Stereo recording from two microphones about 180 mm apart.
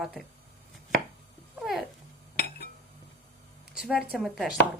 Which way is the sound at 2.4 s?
65° left (ahead or behind).